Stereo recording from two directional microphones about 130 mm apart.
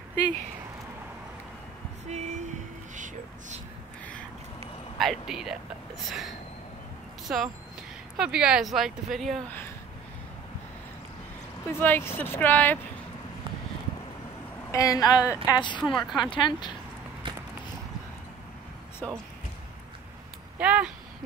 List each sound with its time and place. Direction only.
2.0 s a sound: 60° right (ahead or behind)
3.0 s speech: 70° right (ahead or behind)
4.9 s speech: centre (ahead or behind)
11.8 s speech: 15° left (ahead or behind)
14.7 s a woman's voice: 25° left (ahead or behind)
15.8 s speech: 5° left (ahead or behind)
16.3 s speech: 35° left (ahead or behind)
19.0 s speech: 5° left (ahead or behind)
20.5 s speech: 10° right (ahead or behind)